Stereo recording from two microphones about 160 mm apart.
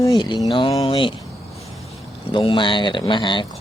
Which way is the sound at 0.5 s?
30° left (ahead or behind).